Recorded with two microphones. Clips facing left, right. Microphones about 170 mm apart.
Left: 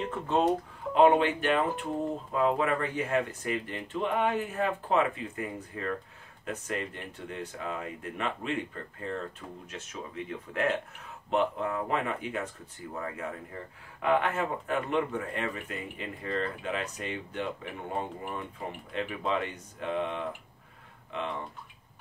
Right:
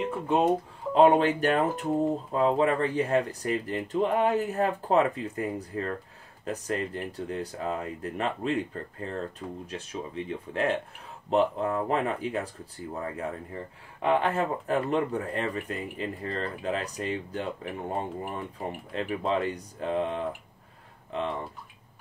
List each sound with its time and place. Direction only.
0.0 s speech: 10° right (ahead or behind)
1.1 s speech: 40° right (ahead or behind)